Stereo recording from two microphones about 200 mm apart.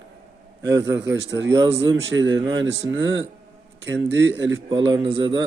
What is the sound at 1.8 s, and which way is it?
Speech, 70° right (ahead or behind).